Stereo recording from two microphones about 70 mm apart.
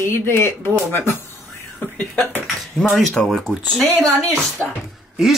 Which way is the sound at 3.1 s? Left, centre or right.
Centre.